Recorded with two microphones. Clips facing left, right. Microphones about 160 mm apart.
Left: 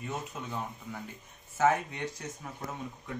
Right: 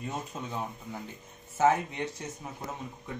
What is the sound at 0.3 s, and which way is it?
Speech, 20° right (ahead or behind).